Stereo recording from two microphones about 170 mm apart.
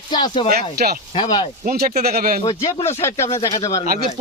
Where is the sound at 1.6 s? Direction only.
60° right (ahead or behind).